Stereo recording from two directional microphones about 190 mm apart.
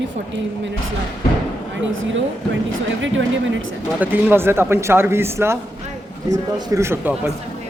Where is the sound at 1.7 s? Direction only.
85° right.